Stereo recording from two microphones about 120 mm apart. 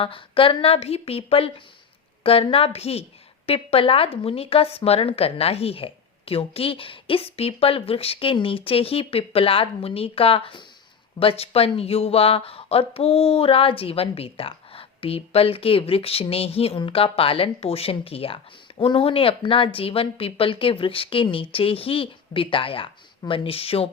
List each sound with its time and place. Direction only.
0.0 s speech: 45° left (ahead or behind)